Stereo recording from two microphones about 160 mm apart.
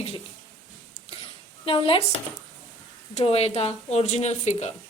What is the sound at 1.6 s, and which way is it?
Speech, 35° left (ahead or behind).